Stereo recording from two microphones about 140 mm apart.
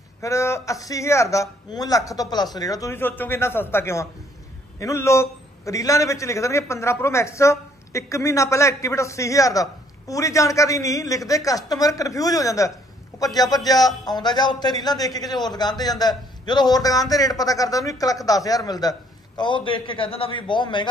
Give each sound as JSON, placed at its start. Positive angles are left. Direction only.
{"t": 0.2, "sound": "a man's voice", "side_deg": 20}